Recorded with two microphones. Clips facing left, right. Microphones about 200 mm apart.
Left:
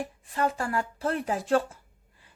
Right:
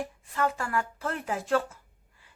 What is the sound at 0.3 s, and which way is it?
A woman's voice, 30° left (ahead or behind).